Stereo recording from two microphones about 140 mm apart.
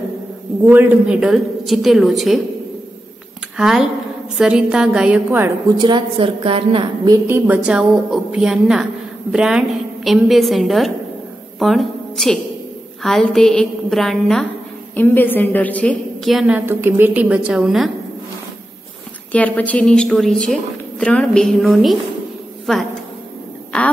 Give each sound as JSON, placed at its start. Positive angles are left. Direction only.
{"t": 0.7, "sound": "a woman's voice", "side_deg": -15}
{"t": 3.5, "sound": "a woman's voice", "side_deg": -5}
{"t": 5.8, "sound": "a woman's voice", "side_deg": -35}
{"t": 7.1, "sound": "a woman's voice", "side_deg": -15}
{"t": 15.0, "sound": "a woman's voice", "side_deg": 15}
{"t": 16.3, "sound": "a woman's voice", "side_deg": -5}
{"t": 19.3, "sound": "a woman's voice", "side_deg": 10}